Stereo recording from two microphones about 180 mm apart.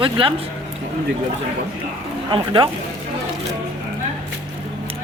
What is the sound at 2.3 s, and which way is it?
Speech, 25° right (ahead or behind).